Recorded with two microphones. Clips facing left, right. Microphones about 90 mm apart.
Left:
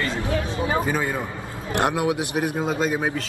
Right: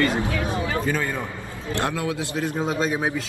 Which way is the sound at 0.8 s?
15° left (ahead or behind).